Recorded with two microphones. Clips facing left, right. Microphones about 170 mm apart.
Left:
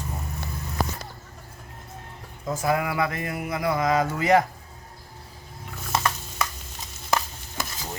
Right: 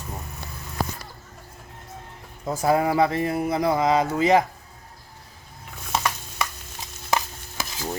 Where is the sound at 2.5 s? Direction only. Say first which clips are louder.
Right 4 dB; 35° right (ahead or behind).